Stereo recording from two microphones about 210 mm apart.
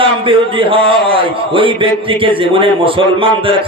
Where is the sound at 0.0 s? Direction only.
25° right (ahead or behind).